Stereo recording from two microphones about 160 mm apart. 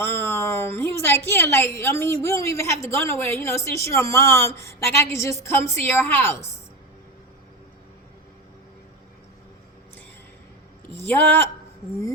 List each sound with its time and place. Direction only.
0.0 s a sound: 15° left (ahead or behind)
2.2 s a woman's voice: 15° left (ahead or behind)
10.9 s a woman's voice: 15° left (ahead or behind)